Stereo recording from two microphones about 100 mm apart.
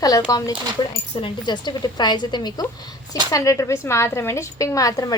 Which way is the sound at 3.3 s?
35° left (ahead or behind).